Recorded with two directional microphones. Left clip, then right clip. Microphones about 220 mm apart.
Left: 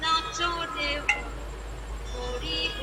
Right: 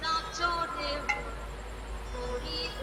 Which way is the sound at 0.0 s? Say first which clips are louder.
Left 4 dB; 15° left (ahead or behind).